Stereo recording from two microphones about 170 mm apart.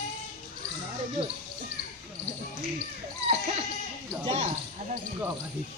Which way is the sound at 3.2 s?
40° right (ahead or behind).